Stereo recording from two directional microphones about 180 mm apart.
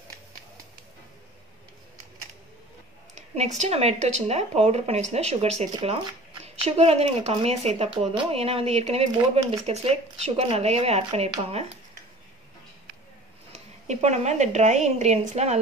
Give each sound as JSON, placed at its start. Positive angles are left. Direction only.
{"t": 3.2, "sound": "speech", "side_deg": -40}
{"t": 13.5, "sound": "speech", "side_deg": -35}